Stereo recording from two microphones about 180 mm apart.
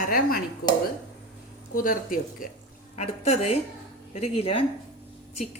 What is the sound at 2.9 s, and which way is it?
Speech, 35° left (ahead or behind).